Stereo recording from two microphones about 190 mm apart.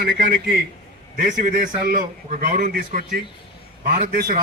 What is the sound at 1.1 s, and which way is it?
A man's voice, 45° right (ahead or behind).